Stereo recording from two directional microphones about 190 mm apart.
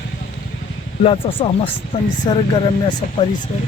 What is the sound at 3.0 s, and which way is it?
Speech, 45° left (ahead or behind).